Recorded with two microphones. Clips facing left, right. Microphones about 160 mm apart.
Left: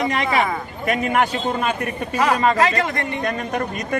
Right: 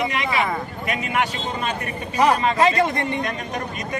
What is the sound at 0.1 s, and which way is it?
A man's voice, 45° left (ahead or behind).